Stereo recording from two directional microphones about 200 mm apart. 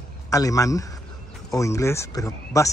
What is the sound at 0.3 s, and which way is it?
Speech, 15° left (ahead or behind).